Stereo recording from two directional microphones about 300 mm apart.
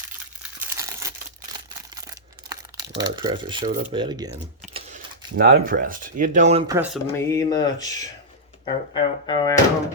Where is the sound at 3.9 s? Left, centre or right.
Centre.